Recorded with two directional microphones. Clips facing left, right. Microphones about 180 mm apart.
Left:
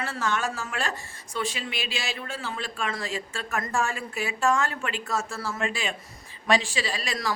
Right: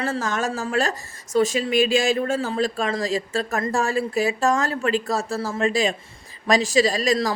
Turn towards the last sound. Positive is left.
turn(degrees=-40)  # may be behind; listen again after turning